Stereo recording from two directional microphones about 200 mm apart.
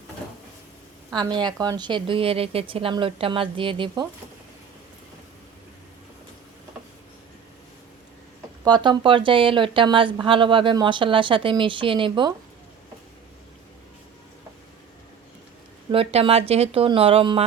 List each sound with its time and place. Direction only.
1.1 s speech: 20° right (ahead or behind)
8.6 s speech: 20° right (ahead or behind)
15.9 s speech: 25° right (ahead or behind)